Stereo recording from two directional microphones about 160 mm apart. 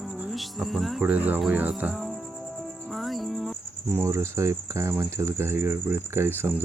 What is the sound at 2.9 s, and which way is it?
Music, centre (ahead or behind).